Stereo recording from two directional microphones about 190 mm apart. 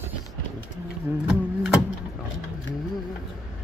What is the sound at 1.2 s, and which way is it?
Music, centre (ahead or behind).